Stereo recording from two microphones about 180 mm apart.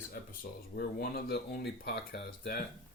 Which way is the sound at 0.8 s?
60° left (ahead or behind).